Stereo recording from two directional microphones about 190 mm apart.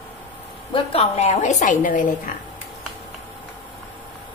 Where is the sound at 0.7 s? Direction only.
30° left (ahead or behind).